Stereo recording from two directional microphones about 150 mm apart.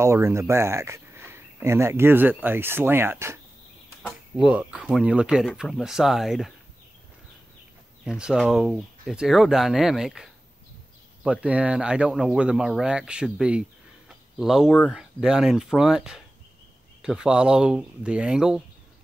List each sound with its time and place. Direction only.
0.0 s speech: 20° right (ahead or behind)
4.4 s speech: 10° right (ahead or behind)
8.0 s speech: 5° right (ahead or behind)